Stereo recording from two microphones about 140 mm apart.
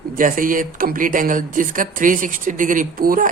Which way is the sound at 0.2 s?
75° right (ahead or behind).